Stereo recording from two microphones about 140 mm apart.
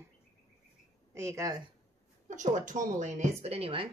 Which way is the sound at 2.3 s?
60° right (ahead or behind).